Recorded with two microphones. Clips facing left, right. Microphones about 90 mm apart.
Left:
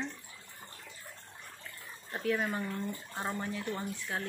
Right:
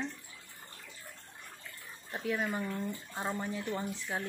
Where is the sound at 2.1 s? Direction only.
Centre (ahead or behind).